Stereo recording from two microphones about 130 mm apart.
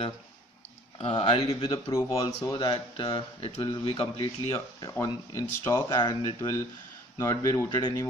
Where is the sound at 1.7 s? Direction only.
25° left (ahead or behind).